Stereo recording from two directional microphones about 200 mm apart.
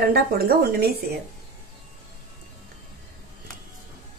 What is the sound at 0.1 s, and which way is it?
Speech, 50° right (ahead or behind).